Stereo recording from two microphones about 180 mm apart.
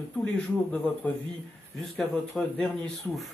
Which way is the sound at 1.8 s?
5° left (ahead or behind).